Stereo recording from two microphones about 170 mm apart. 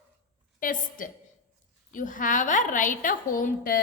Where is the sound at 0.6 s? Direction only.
50° left (ahead or behind).